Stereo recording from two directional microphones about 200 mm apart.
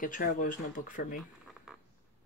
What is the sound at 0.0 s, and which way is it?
Speech, 45° left (ahead or behind).